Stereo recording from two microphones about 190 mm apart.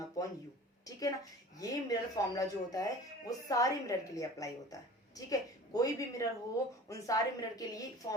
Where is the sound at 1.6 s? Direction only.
20° left (ahead or behind).